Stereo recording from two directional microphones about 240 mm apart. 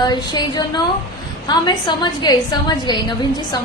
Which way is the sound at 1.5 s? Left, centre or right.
Centre.